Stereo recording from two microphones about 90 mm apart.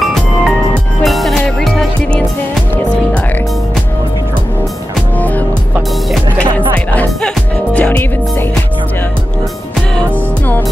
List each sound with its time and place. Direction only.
1.0 s music: centre (ahead or behind)
7.2 s music: 10° left (ahead or behind)